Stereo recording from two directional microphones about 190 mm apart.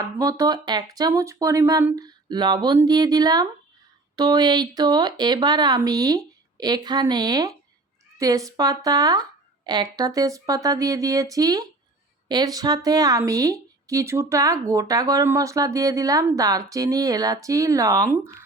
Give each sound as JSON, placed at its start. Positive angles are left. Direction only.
{"t": 0.0, "sound": "speech", "side_deg": -20}